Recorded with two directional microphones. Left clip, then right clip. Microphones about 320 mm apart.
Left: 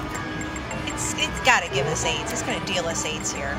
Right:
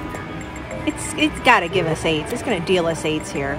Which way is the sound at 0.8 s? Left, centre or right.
Centre.